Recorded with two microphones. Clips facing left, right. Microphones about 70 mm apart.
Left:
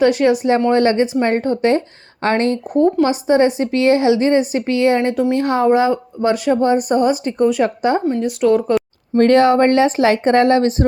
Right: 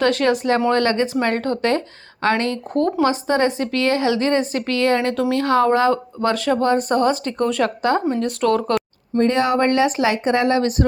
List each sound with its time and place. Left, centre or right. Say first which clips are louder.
0.0 s a woman's voice: left 4 dB; centre
2.2 s speech: left 3 dB; left
2.7 s a woman's voice: left 3 dB; centre
9.1 s speech: left 6 dB; left
9.4 s speech: left 5 dB; left